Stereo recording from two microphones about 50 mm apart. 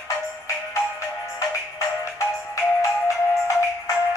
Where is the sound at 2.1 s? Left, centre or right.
Left.